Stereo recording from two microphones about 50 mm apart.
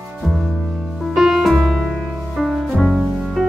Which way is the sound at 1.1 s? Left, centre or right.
Centre.